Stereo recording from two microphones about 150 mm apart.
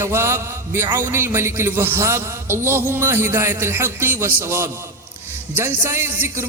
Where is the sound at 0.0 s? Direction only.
15° right (ahead or behind).